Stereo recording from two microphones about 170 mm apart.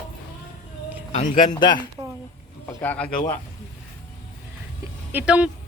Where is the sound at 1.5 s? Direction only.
25° left (ahead or behind).